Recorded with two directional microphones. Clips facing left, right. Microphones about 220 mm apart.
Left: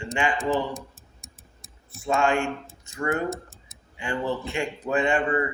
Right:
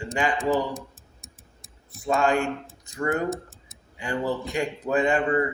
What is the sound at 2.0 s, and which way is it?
Mantra, 35° right (ahead or behind).